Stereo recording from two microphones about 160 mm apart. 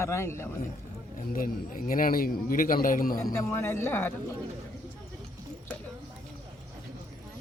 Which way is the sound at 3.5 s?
15° left (ahead or behind).